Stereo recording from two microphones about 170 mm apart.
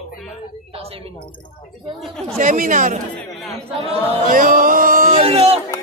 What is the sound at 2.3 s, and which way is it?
Speech, 50° right (ahead or behind).